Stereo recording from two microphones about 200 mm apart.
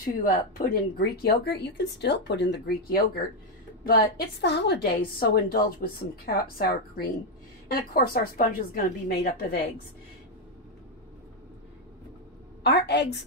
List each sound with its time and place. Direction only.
0.0 s a woman's voice: 45° left (ahead or behind)
12.6 s speech: 55° left (ahead or behind)